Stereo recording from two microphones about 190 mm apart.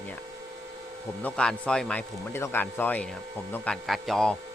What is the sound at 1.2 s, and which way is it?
Speech, 5° left (ahead or behind).